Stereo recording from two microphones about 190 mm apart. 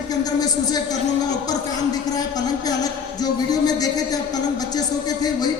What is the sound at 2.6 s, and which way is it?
Speech, 20° left (ahead or behind).